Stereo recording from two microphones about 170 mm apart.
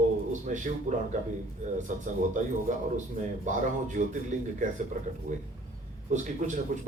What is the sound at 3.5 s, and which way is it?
Speech, 45° right (ahead or behind).